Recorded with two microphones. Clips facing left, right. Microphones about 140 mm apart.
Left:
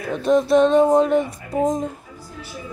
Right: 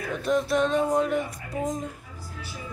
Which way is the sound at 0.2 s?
25° left (ahead or behind).